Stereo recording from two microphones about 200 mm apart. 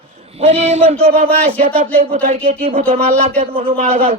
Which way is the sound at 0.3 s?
30° right (ahead or behind).